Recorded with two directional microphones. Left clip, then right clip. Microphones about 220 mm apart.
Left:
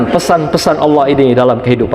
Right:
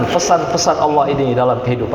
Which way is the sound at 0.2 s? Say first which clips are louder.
Left 1 dB; 55° left (ahead or behind).